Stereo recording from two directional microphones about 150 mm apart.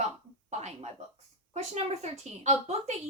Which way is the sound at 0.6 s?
45° right (ahead or behind).